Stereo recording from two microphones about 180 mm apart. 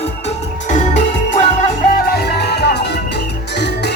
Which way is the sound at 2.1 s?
65° left (ahead or behind).